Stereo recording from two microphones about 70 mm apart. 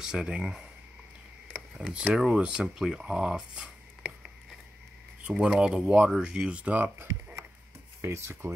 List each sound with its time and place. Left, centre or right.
0.0 s speech: centre
1.8 s speech: centre
7.0 s a sound: right
8.0 s speech: right